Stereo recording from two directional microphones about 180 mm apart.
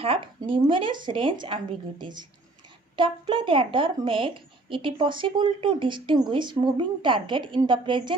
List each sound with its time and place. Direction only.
0.0 s speech: 30° right (ahead or behind)